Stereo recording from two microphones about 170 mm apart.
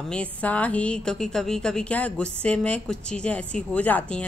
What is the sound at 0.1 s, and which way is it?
A woman's voice, 10° left (ahead or behind).